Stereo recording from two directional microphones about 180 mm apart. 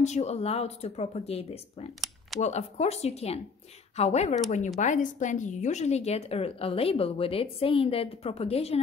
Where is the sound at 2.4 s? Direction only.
40° left (ahead or behind).